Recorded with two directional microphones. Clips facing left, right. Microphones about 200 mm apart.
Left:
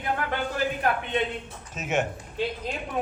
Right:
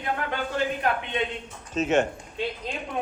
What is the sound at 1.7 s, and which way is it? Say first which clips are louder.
Speech: right 5 dB; 10° left (ahead or behind).